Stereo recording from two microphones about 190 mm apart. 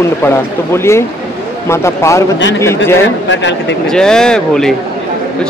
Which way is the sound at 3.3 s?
70° left (ahead or behind).